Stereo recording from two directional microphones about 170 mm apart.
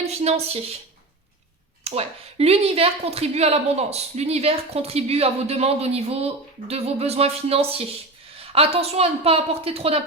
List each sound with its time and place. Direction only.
0.0 s a woman's voice: 40° right (ahead or behind)
1.8 s speech: 35° right (ahead or behind)